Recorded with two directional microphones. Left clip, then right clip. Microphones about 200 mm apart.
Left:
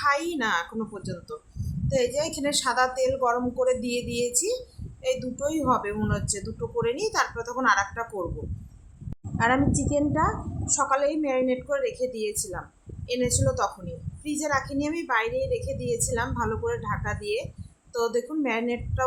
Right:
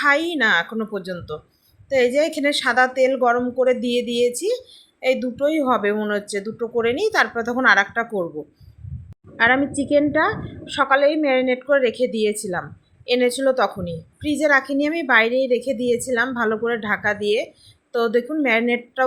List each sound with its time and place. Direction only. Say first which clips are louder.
0.0 s a woman's voice: right 7 dB; 15° right (ahead or behind)
9.4 s a woman's voice: right 6 dB; 20° right (ahead or behind)